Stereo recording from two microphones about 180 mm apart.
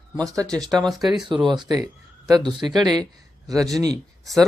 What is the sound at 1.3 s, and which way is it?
Speech, 25° right (ahead or behind).